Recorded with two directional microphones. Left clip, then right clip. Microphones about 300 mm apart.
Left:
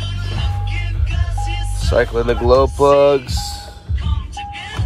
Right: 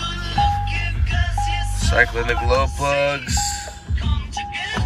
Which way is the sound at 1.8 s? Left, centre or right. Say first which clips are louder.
Left 2 dB; centre.